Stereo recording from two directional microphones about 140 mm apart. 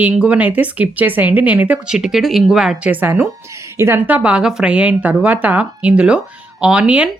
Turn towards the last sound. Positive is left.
turn(degrees=-10)  # may be behind; listen again after turning